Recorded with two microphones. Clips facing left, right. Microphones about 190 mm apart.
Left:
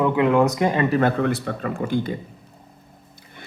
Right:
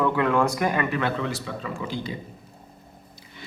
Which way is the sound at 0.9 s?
50° left (ahead or behind).